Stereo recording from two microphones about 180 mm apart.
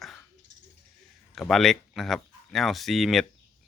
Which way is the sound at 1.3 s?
Centre (ahead or behind).